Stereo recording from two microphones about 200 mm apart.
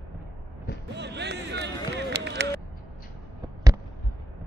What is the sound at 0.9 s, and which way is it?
Run, 60° right (ahead or behind).